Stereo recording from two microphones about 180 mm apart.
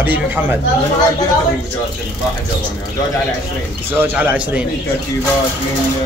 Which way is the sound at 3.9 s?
10° right (ahead or behind).